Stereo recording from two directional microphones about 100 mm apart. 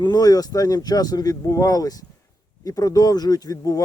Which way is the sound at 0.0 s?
40° left (ahead or behind).